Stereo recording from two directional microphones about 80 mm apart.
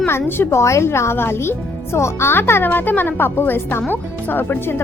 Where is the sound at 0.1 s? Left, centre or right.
Left.